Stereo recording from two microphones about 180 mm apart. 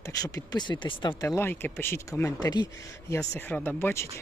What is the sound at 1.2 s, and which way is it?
Speech, 15° left (ahead or behind).